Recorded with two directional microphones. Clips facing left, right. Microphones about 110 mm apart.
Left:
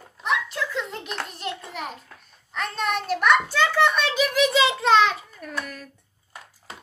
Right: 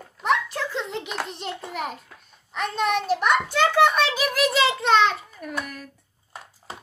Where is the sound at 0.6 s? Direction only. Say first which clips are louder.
Right 1 dB; 30° right (ahead or behind).